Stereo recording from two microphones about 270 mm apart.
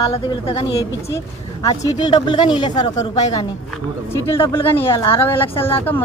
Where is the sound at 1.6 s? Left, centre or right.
Centre.